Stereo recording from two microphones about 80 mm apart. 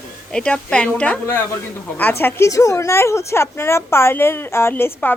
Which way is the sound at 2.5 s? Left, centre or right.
Left.